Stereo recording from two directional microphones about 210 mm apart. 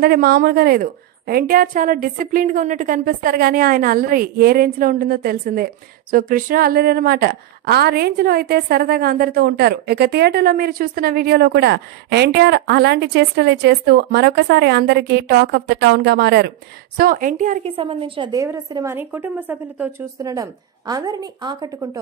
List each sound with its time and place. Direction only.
0.0 s a woman's voice: 45° right (ahead or behind)
17.7 s a woman's voice: 25° right (ahead or behind)